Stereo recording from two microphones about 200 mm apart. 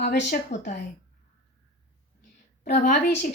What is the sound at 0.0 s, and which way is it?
Speech, 55° left (ahead or behind).